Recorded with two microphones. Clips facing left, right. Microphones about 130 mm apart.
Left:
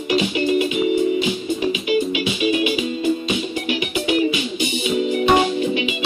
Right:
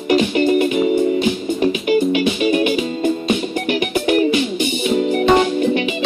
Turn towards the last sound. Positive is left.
turn(degrees=-50)  # may be behind; listen again after turning